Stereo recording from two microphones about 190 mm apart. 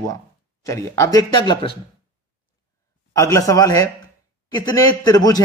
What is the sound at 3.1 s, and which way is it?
A man's voice, 15° left (ahead or behind).